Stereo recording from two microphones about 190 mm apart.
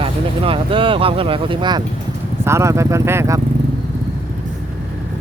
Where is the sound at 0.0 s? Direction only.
30° right (ahead or behind).